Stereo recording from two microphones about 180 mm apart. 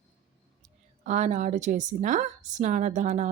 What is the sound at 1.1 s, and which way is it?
A woman's voice, 40° right (ahead or behind).